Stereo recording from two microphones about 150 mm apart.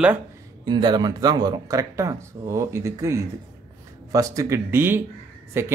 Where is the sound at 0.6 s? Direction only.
30° right (ahead or behind).